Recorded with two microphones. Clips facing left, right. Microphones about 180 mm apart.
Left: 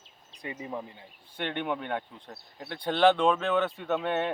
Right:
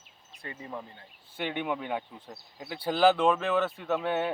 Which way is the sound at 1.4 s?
5° right (ahead or behind).